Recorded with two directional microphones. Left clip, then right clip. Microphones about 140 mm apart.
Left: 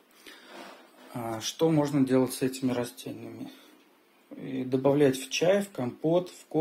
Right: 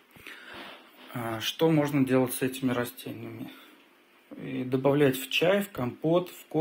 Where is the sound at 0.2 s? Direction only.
15° left (ahead or behind).